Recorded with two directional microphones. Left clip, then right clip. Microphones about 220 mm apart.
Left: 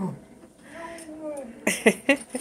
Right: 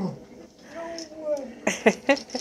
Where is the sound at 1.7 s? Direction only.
15° left (ahead or behind).